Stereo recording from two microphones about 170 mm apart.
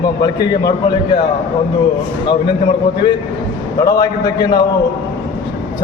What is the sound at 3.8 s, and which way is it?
Speech, 20° left (ahead or behind).